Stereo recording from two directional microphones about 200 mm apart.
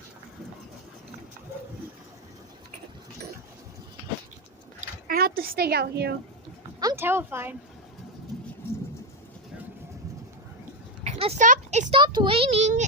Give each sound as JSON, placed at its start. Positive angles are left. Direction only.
{"t": 5.0, "sound": "a woman's voice", "side_deg": -50}
{"t": 6.7, "sound": "speech", "side_deg": -15}
{"t": 8.3, "sound": "bird", "side_deg": 0}
{"t": 11.0, "sound": "a child's voice", "side_deg": -30}